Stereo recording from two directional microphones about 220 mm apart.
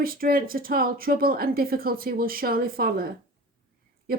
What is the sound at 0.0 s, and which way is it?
Speech, 40° right (ahead or behind).